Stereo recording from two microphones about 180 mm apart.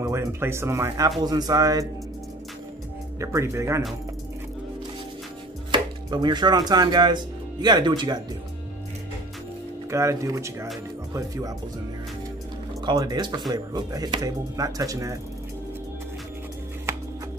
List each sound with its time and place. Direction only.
0.0 s speech: 15° right (ahead or behind)
3.2 s speech: 15° right (ahead or behind)
5.7 s speech: 25° right (ahead or behind)
9.8 s speech: 15° right (ahead or behind)
12.8 s speech: 25° right (ahead or behind)